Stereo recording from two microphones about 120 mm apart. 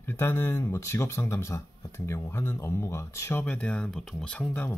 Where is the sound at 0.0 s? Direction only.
20° left (ahead or behind).